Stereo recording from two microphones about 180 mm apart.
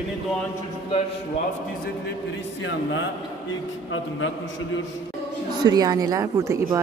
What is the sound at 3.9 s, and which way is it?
Speech, 90° left.